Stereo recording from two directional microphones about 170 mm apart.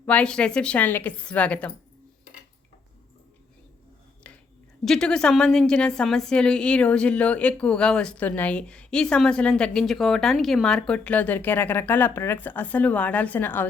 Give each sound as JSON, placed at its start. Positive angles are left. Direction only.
{"t": 0.0, "sound": "a woman's voice", "side_deg": 5}
{"t": 4.9, "sound": "a woman's voice", "side_deg": 5}